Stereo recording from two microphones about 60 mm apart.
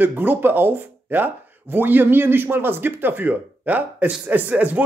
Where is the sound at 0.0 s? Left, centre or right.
Right.